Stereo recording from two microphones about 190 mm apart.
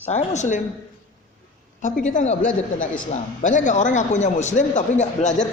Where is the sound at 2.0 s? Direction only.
40° left (ahead or behind).